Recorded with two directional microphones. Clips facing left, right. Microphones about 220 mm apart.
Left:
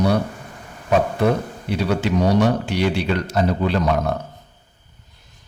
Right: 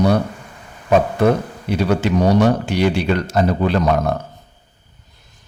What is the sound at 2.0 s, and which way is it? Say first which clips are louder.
A man's voice: right 2 dB; 45° right (ahead or behind).